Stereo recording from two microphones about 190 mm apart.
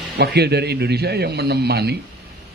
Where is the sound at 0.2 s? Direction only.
60° right (ahead or behind).